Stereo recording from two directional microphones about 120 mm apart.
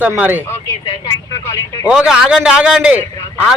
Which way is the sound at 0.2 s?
15° right (ahead or behind).